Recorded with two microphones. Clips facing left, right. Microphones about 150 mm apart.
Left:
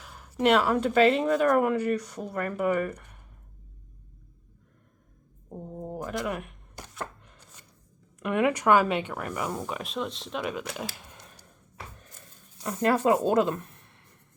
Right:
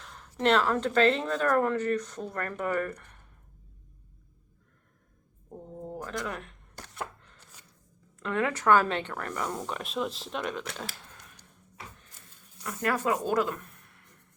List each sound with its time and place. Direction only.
0.0 s speech: 5° left (ahead or behind)
5.5 s a sound: 15° left (ahead or behind)
7.2 s chopping: 15° left (ahead or behind)
8.2 s speech: 15° left (ahead or behind)
12.6 s a woman's voice: 25° left (ahead or behind)